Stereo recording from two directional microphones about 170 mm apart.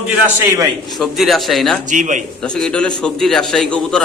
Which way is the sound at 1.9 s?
45° right (ahead or behind).